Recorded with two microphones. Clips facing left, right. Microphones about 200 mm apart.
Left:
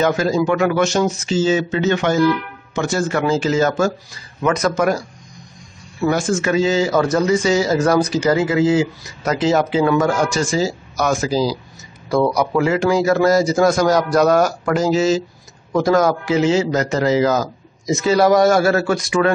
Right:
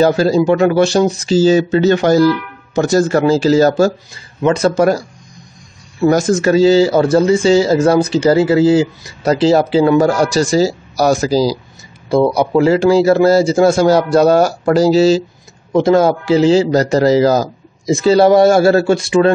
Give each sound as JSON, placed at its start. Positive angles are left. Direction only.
{"t": 0.0, "sound": "a man's voice", "side_deg": -35}
{"t": 6.0, "sound": "a man's voice", "side_deg": -40}
{"t": 12.1, "sound": "a man's voice", "side_deg": -25}